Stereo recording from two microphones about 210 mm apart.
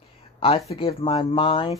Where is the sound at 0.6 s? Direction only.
25° left (ahead or behind).